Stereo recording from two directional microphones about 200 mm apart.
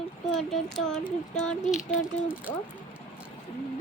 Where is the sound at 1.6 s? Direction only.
35° left (ahead or behind).